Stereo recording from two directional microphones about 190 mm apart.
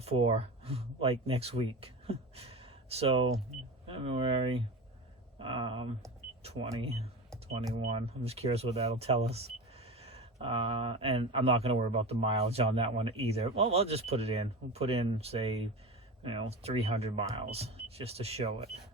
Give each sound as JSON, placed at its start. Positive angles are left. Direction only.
{"t": 0.0, "sound": "speech", "side_deg": -30}